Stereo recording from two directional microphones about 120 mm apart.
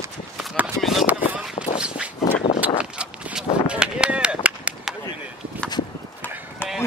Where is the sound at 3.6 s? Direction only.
10° right (ahead or behind).